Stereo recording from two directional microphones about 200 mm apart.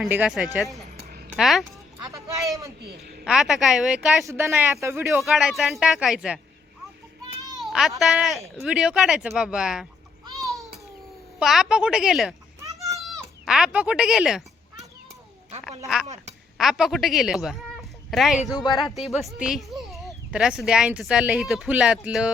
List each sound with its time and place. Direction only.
0.0 s speech: 5° right (ahead or behind)
2.0 s a sound: 15° right (ahead or behind)
3.2 s speech: centre (ahead or behind)
5.0 s speech: centre (ahead or behind)
7.5 s speech: centre (ahead or behind)
11.3 s speech: centre (ahead or behind)
12.6 s a sound: 15° right (ahead or behind)
13.4 s speech: 5° right (ahead or behind)
16.6 s speech: centre (ahead or behind)
18.5 s speech: 20° left (ahead or behind)
19.1 s speech: 5° right (ahead or behind)